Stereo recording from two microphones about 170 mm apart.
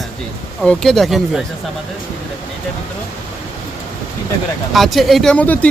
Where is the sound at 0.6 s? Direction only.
Centre (ahead or behind).